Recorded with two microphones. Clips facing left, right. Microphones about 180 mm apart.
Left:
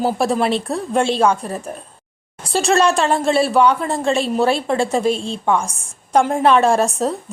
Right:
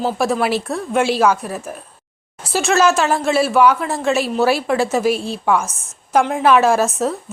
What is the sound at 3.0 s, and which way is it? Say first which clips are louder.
Speech: even; 30° left (ahead or behind).